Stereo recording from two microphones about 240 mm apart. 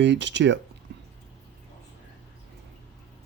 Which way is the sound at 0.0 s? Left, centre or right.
Right.